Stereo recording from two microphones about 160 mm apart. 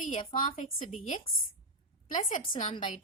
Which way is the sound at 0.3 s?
55° left (ahead or behind).